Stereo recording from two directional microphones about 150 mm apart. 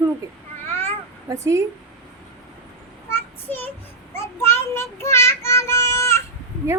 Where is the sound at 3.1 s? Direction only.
15° left (ahead or behind).